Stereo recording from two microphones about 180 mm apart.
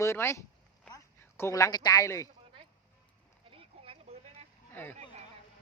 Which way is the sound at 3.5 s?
30° right (ahead or behind).